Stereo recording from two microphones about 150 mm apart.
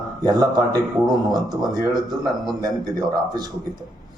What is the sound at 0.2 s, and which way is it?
A man's voice, 25° right (ahead or behind).